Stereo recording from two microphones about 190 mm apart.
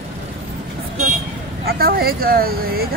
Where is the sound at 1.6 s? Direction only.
55° right (ahead or behind).